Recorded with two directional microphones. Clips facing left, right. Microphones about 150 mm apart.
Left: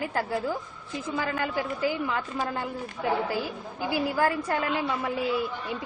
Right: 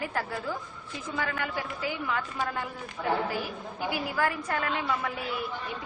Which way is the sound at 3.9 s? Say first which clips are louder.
Left 5 dB; 30° left (ahead or behind).